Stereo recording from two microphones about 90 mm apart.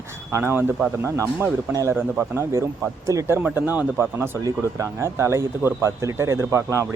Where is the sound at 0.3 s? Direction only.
30° right (ahead or behind).